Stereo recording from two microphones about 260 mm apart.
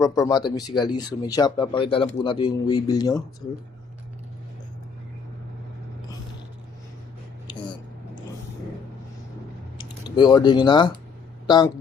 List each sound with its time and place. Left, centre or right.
0.0 s speech: centre
9.7 s speech: centre